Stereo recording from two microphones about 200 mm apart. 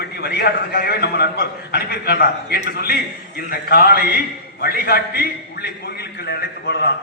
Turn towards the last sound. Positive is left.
turn(degrees=55)  # may be behind; listen again after turning